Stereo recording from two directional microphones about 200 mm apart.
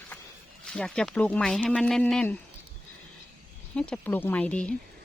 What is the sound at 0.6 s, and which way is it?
Speech, 5° left (ahead or behind).